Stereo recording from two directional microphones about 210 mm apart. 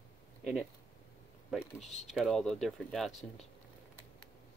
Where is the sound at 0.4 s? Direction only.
Centre (ahead or behind).